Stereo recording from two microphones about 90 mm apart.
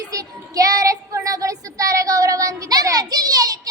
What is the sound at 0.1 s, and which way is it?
Child singing, 40° right (ahead or behind).